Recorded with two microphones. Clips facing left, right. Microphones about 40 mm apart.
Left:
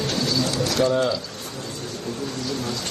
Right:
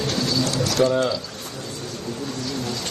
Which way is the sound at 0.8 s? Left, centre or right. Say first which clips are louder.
Right 2 dB; centre.